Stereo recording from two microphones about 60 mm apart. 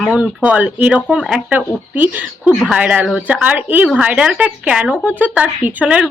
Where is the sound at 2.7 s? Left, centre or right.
Right.